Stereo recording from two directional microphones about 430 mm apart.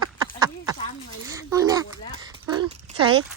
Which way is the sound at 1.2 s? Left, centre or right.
Centre.